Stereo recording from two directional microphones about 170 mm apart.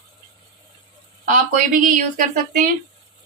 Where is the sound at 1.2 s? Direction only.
50° right (ahead or behind).